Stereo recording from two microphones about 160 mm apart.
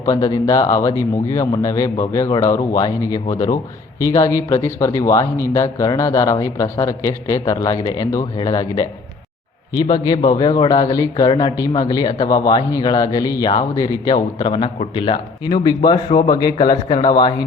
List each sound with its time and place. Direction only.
0.0 s speech: 25° left (ahead or behind)